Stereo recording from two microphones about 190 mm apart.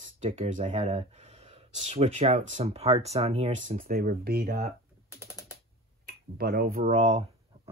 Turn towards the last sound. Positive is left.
turn(degrees=-40)  # may be behind; listen again after turning